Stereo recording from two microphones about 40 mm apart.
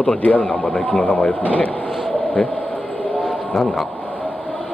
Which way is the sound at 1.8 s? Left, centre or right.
Centre.